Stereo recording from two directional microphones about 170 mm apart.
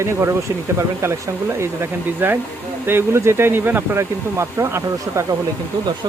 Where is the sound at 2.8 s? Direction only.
15° right (ahead or behind).